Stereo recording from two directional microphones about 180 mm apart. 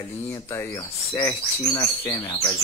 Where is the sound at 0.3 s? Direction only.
15° left (ahead or behind).